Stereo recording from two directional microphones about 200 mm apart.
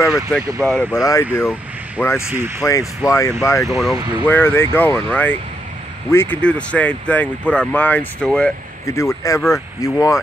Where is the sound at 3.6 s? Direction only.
Centre (ahead or behind).